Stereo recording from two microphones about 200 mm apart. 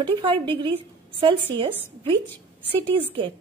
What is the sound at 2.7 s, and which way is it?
Speech, 25° right (ahead or behind).